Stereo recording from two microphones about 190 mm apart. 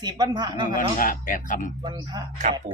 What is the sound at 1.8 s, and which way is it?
Speech, 25° right (ahead or behind).